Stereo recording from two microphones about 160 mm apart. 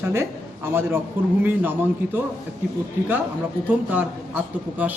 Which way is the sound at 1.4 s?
15° right (ahead or behind).